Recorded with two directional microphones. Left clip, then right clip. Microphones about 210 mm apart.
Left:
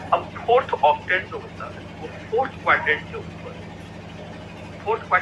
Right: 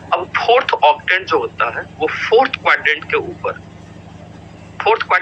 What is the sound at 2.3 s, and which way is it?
Speech, 45° right (ahead or behind).